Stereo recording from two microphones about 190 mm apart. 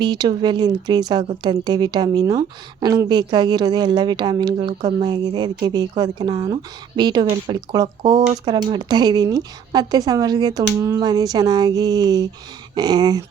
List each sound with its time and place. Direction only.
0.0 s a woman's voice: 25° right (ahead or behind)